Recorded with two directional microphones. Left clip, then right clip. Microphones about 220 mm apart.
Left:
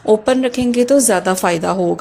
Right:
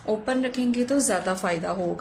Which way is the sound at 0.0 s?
35° left (ahead or behind).